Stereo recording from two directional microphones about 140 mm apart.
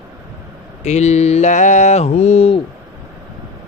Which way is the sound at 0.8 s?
55° left (ahead or behind).